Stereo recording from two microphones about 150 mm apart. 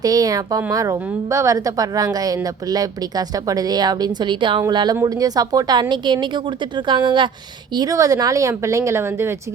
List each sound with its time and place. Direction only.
0.0 s a woman's voice: 25° right (ahead or behind)